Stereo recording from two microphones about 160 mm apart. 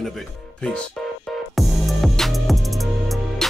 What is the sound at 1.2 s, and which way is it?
Music, centre (ahead or behind).